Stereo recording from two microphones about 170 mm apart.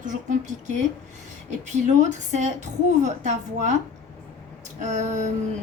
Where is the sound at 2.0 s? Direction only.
45° right (ahead or behind).